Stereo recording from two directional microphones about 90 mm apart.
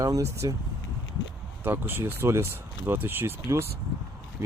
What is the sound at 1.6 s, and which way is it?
Speech, 25° right (ahead or behind).